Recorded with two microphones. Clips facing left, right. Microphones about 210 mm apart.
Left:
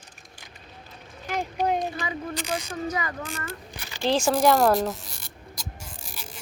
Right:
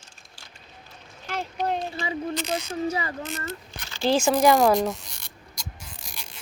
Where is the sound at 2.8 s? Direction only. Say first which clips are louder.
Right 2 dB; 30° right (ahead or behind).